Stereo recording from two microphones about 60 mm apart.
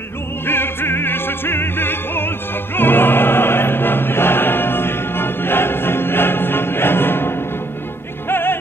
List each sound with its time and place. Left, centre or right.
0.5 s music: left